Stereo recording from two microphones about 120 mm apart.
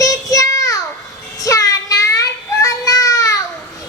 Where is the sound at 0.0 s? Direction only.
30° left (ahead or behind).